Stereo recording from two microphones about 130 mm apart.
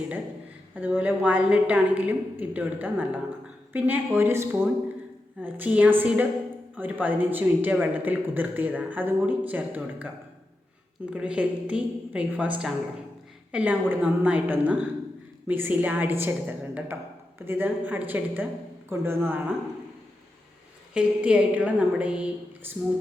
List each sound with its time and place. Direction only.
0.8 s a man's voice: 15° right (ahead or behind)
11.1 s a man's voice: 10° right (ahead or behind)
20.9 s a man's voice: 10° right (ahead or behind)